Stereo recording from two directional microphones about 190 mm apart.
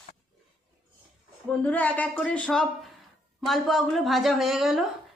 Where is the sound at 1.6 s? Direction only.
10° left (ahead or behind).